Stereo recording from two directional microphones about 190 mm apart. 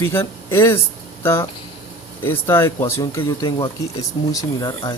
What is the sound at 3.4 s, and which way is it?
Speech, 25° left (ahead or behind).